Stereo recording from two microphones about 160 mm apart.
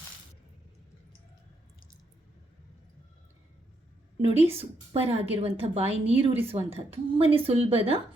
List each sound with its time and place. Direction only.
4.2 s a woman's voice: 40° right (ahead or behind)